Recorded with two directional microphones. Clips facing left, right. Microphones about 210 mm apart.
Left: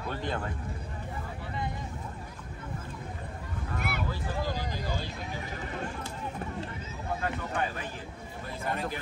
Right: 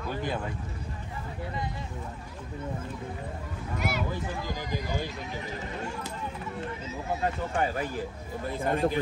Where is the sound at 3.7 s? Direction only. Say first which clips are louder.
Right 4 dB; 55° left (ahead or behind).